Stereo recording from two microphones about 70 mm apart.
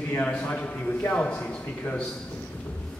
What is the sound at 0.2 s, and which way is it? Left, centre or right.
A man's voice, centre.